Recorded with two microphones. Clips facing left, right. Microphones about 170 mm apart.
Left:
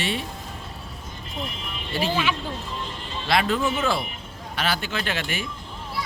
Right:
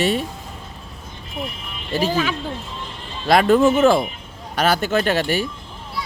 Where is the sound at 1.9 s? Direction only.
40° right (ahead or behind).